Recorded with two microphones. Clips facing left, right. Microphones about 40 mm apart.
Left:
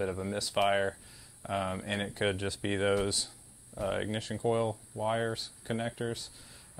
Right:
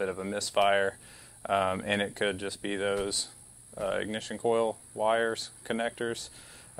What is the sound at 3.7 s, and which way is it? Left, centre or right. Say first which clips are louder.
Speech: right 2 dB; centre.